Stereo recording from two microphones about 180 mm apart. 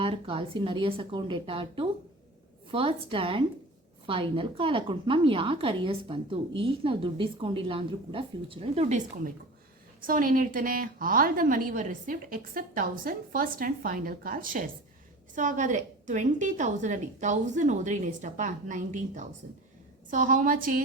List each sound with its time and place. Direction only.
0.0 s a woman's voice: 30° right (ahead or behind); by 20.8 s 50° right (ahead or behind)